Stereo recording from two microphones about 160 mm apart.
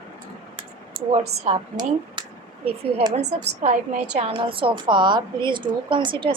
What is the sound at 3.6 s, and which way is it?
A woman's voice, 45° right (ahead or behind).